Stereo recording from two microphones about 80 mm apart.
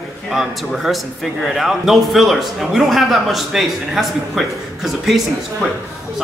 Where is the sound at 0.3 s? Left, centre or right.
Centre.